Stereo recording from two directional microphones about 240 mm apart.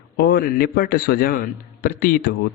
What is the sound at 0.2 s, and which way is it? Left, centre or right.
A man's voice, left.